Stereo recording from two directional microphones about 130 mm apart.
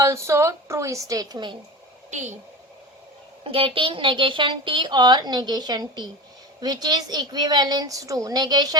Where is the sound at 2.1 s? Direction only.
65° right (ahead or behind).